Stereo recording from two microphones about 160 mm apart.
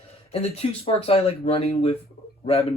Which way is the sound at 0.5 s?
40° left (ahead or behind).